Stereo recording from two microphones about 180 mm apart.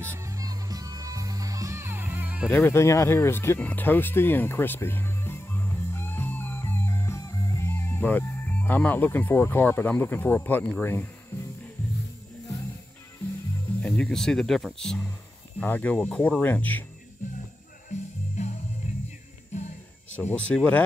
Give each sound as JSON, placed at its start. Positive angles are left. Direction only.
{"t": 0.0, "sound": "music", "side_deg": -15}
{"t": 2.5, "sound": "speech", "side_deg": 15}
{"t": 13.8, "sound": "speech", "side_deg": 5}
{"t": 18.4, "sound": "music", "side_deg": 35}
{"t": 20.1, "sound": "speech", "side_deg": 5}